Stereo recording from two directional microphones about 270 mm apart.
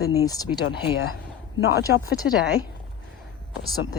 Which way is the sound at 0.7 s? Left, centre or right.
Left.